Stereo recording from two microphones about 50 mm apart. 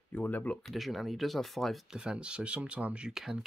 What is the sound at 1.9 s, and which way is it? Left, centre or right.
Speech, centre.